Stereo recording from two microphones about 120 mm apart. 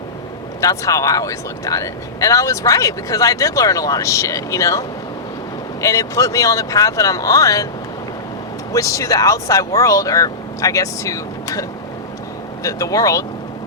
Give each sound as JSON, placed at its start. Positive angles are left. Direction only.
{"t": 0.6, "sound": "speech", "side_deg": 30}
{"t": 8.7, "sound": "speech", "side_deg": 25}
{"t": 12.6, "sound": "speech", "side_deg": 30}